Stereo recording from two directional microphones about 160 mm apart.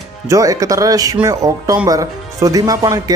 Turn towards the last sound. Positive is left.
turn(degrees=-25)  # may be behind; listen again after turning